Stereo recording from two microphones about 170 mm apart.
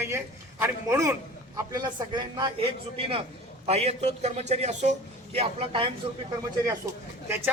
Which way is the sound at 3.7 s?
40° right (ahead or behind).